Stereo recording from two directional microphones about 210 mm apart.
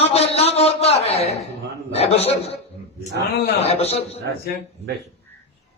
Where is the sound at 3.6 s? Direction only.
30° left (ahead or behind).